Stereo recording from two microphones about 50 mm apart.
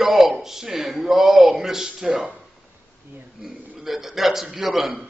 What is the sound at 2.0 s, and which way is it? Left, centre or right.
Speech, right.